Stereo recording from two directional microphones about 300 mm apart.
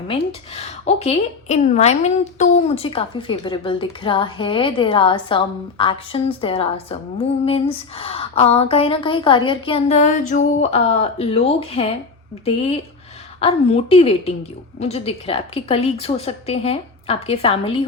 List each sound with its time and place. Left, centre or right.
0.1 s speech: centre